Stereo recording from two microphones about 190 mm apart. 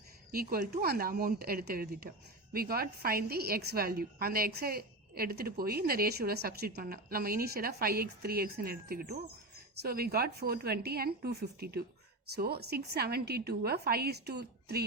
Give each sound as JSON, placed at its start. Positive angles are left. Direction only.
{"t": 0.3, "sound": "a woman's voice", "side_deg": -50}